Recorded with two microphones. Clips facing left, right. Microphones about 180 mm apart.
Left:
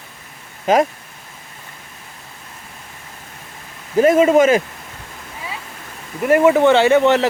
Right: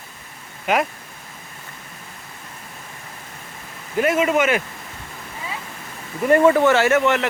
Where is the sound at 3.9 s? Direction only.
30° left (ahead or behind).